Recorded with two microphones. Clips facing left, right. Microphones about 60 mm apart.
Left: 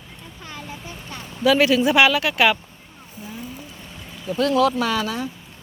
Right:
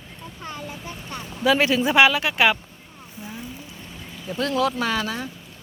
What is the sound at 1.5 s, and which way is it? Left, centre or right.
Speech, right.